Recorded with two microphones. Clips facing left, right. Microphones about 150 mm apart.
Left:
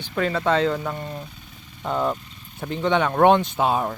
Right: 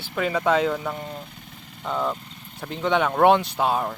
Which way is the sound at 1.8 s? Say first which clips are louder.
Left 2 dB; 10° left (ahead or behind).